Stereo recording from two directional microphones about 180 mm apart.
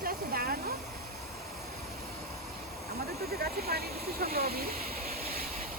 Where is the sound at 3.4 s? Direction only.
60° right (ahead or behind).